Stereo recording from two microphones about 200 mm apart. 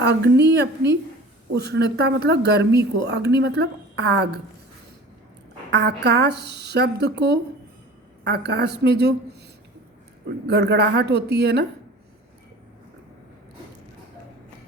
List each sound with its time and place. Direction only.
0.0 s speech: 55° right (ahead or behind)
5.7 s speech: 55° right (ahead or behind)
10.4 s speech: 55° right (ahead or behind)